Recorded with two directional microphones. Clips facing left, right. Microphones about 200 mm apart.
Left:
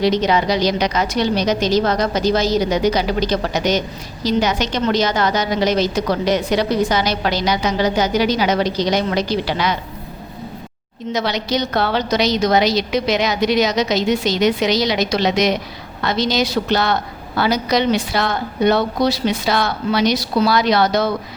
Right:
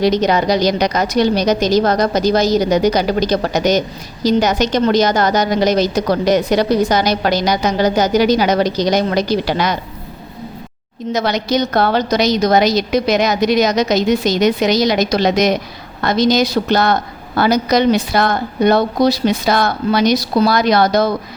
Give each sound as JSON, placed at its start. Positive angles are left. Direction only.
{"t": 0.0, "sound": "a woman's voice", "side_deg": -45}
{"t": 11.1, "sound": "a woman's voice", "side_deg": -45}